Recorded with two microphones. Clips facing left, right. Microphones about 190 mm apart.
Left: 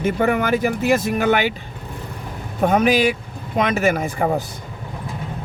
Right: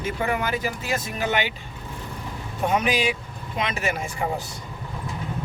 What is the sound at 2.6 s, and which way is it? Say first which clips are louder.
Speech: left 7 dB; 55° left (ahead or behind).